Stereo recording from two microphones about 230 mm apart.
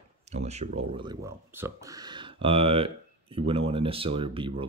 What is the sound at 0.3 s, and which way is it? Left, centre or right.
Speech, right.